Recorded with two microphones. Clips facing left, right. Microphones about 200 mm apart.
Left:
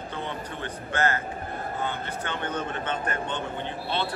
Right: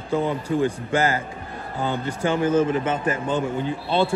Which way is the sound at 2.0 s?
10° right (ahead or behind).